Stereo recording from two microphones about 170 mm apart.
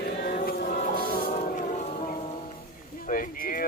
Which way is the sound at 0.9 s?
60° left (ahead or behind).